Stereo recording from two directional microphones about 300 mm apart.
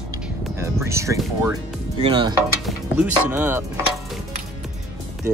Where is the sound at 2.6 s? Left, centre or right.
Centre.